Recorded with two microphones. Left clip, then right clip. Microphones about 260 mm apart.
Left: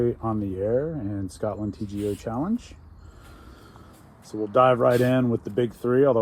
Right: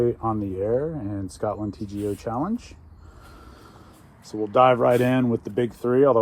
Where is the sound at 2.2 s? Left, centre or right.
Right.